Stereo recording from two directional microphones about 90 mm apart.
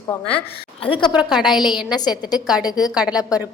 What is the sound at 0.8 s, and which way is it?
Speech, 70° left (ahead or behind).